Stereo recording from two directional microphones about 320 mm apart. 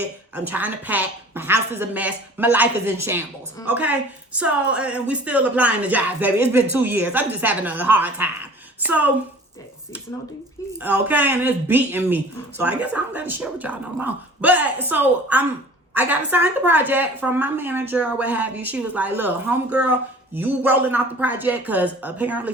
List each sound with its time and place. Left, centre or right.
0.3 s a woman's voice: centre
10.8 s a woman's voice: centre